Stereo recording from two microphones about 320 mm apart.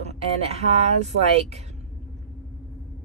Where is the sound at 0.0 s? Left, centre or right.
Centre.